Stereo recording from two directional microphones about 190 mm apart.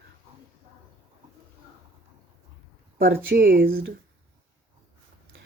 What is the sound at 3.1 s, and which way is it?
Speech, 50° right (ahead or behind).